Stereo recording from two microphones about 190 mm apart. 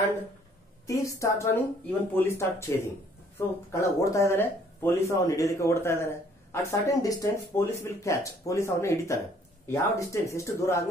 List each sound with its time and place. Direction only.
0.8 s speech: 15° left (ahead or behind)